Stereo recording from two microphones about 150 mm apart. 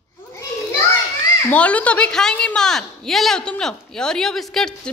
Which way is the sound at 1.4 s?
10° left (ahead or behind).